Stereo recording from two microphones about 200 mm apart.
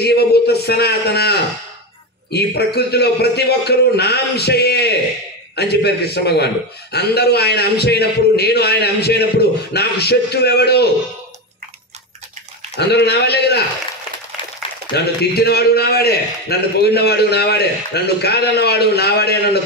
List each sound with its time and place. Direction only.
0.0 s a man's voice: 55° left (ahead or behind)
12.7 s a man's voice: 55° left (ahead or behind)
15.3 s a man's voice: 50° left (ahead or behind)